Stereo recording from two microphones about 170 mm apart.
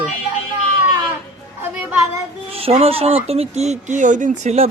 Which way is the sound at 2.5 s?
35° right (ahead or behind).